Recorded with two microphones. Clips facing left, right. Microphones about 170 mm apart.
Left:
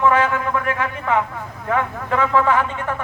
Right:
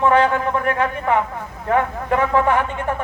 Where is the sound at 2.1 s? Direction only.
20° right (ahead or behind).